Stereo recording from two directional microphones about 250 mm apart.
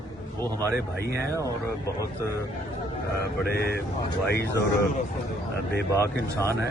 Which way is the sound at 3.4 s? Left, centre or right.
Left.